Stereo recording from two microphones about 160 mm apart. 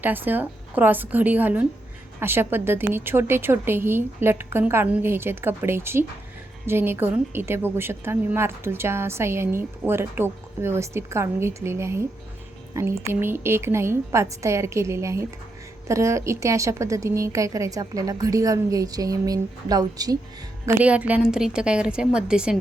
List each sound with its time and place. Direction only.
0.0 s a woman's voice: 10° right (ahead or behind)
20.7 s a woman's voice: 10° right (ahead or behind)